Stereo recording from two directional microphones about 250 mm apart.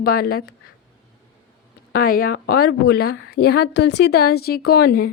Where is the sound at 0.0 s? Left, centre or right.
Left.